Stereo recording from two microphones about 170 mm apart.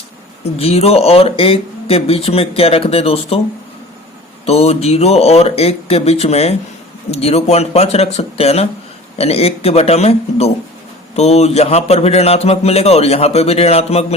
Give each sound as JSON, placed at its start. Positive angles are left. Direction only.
{"t": 0.6, "sound": "a man's voice", "side_deg": 35}
{"t": 4.4, "sound": "a man's voice", "side_deg": 35}